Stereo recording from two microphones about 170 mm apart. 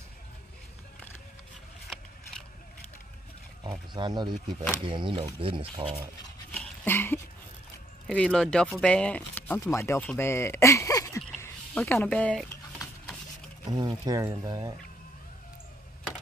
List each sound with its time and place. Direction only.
3.6 s speech: 25° right (ahead or behind)
6.5 s a sound: 10° left (ahead or behind)
8.1 s speech: 5° left (ahead or behind)
13.7 s speech: 25° right (ahead or behind)